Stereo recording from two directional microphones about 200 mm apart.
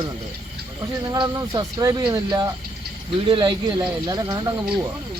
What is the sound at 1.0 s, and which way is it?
Speech, 20° right (ahead or behind).